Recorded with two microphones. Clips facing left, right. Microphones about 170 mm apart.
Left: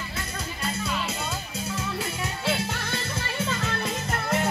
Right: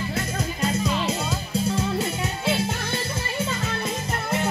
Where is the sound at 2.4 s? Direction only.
20° right (ahead or behind).